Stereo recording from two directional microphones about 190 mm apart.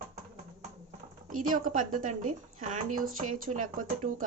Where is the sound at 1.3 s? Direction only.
45° right (ahead or behind).